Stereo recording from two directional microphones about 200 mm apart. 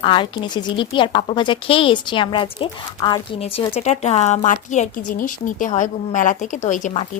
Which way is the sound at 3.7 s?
35° left (ahead or behind).